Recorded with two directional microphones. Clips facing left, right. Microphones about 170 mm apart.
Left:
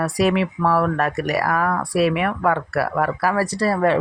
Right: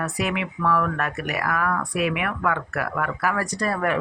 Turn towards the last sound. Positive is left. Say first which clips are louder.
# left 6 dB
turn(degrees=30)  # may be behind; listen again after turning